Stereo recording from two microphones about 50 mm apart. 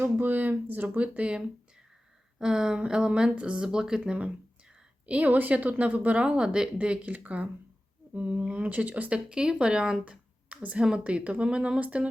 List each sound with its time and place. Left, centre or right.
0.0 s speech: right; by 4.3 s centre
5.0 s speech: right
9.1 s speech: centre